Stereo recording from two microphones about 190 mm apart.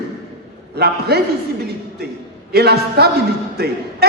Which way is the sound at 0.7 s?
55° right (ahead or behind).